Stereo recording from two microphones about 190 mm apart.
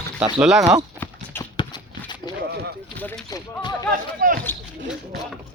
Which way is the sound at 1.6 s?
25° left (ahead or behind).